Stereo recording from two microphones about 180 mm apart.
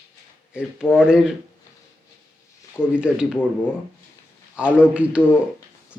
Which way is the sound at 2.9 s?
5° right (ahead or behind).